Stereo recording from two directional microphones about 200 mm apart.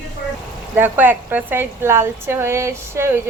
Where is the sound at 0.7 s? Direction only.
10° right (ahead or behind).